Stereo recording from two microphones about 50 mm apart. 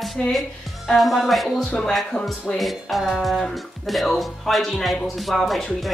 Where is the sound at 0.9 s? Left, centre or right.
Centre.